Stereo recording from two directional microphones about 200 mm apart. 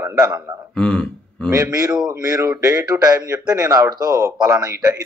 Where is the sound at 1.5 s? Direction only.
20° right (ahead or behind).